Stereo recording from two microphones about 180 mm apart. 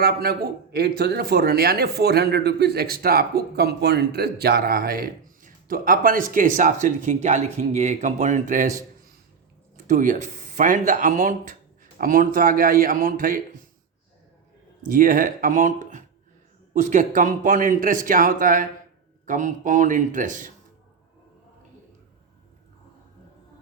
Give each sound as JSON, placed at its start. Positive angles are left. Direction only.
{"t": 0.0, "sound": "a man's voice", "side_deg": -55}
{"t": 9.9, "sound": "speech", "side_deg": -45}
{"t": 14.8, "sound": "speech", "side_deg": -50}